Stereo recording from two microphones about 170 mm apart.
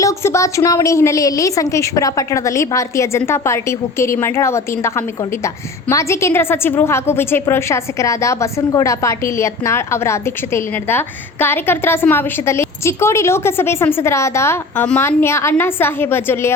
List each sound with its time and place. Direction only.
0.0 s a woman's voice: 15° left (ahead or behind)